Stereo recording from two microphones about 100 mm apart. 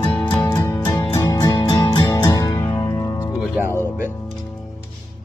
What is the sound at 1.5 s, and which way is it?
Music, 45° left (ahead or behind).